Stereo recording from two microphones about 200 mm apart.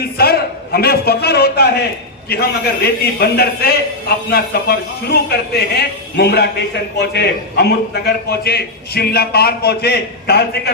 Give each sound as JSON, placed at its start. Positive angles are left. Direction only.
{"t": 0.0, "sound": "a man's voice", "side_deg": 50}